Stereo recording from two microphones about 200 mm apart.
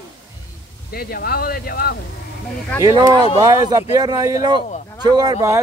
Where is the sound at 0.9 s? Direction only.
50° left (ahead or behind).